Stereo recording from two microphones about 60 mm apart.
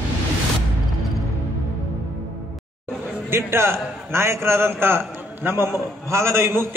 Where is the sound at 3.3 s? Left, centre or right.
Right.